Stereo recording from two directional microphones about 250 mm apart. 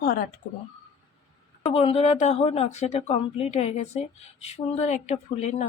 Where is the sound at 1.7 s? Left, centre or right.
Left.